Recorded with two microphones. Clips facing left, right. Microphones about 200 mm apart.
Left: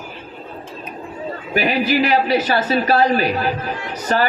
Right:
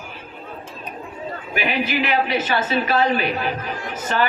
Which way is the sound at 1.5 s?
40° left (ahead or behind).